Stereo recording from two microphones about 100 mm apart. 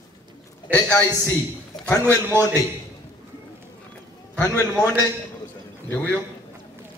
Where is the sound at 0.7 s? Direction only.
10° left (ahead or behind).